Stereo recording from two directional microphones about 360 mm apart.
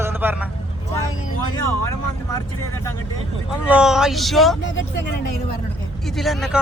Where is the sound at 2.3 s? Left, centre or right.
Centre.